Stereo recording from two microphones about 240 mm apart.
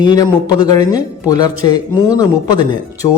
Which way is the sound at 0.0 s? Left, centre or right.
Centre.